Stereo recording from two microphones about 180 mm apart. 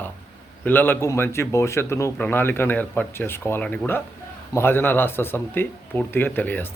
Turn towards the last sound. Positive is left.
turn(degrees=10)  # may be behind; listen again after turning